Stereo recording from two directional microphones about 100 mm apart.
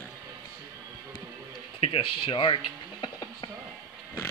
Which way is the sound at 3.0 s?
50° left (ahead or behind).